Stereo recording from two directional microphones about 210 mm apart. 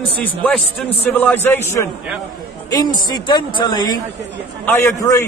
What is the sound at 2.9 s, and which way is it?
Speech, 20° left (ahead or behind).